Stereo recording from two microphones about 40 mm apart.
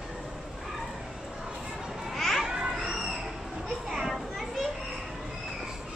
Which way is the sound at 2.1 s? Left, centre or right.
Centre.